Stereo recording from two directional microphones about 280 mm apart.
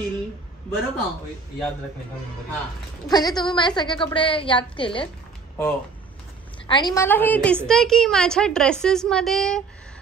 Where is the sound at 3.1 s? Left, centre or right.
Centre.